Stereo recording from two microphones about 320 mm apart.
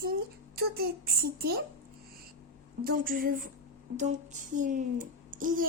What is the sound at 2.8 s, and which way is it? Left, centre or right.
Speech, right.